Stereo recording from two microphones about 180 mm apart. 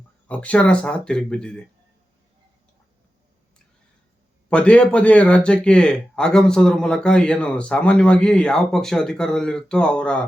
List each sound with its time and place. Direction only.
0.3 s speech: 5° left (ahead or behind)
4.4 s speech: 5° left (ahead or behind)